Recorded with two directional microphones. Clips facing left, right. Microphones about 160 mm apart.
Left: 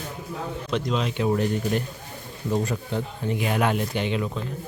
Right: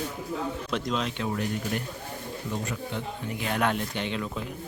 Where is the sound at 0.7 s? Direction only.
Centre (ahead or behind).